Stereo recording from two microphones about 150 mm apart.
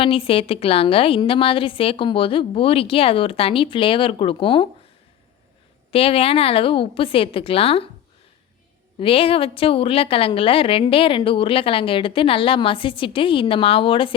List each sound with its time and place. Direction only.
0.0 s a woman's voice: 35° left (ahead or behind)
5.9 s a woman's voice: 40° left (ahead or behind)
9.0 s a woman's voice: 40° left (ahead or behind)